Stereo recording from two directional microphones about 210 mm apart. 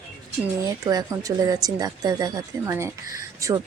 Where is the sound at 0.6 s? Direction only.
15° right (ahead or behind).